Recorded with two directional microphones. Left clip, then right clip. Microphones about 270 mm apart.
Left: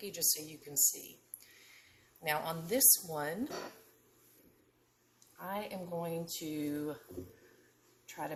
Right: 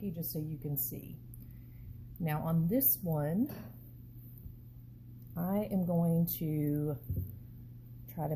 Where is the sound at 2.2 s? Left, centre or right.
Centre.